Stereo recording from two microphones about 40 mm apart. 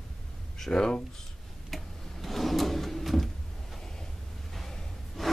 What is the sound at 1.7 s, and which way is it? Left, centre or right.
Drawer open or close, centre.